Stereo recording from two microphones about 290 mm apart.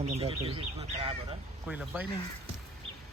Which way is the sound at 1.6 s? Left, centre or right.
Centre.